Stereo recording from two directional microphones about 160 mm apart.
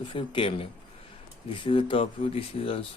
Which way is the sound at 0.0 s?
30° left (ahead or behind).